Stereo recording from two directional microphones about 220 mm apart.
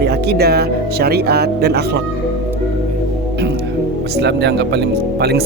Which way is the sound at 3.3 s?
50° right (ahead or behind).